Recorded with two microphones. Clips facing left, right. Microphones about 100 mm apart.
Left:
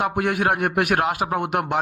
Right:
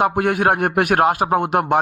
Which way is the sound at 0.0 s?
45° right (ahead or behind).